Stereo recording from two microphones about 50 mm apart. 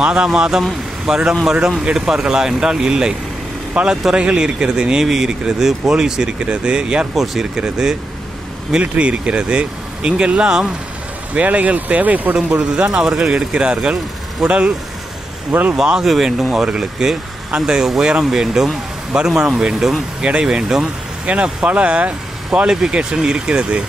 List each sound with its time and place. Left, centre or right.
0.0 s speech: centre
8.9 s speech: right
11.3 s speech: right
13.0 s speech: centre
15.7 s speech: centre
21.3 s speech: right
22.7 s speech: centre